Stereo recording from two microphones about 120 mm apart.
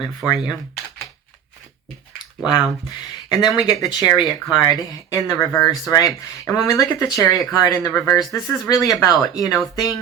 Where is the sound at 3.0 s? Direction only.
35° left (ahead or behind).